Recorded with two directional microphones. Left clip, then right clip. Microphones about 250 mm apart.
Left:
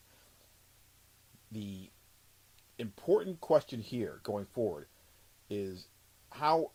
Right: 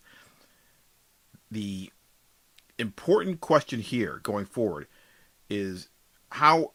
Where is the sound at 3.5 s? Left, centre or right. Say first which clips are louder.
Right 5 dB; centre.